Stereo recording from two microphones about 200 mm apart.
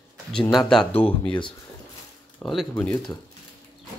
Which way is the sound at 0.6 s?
Centre (ahead or behind).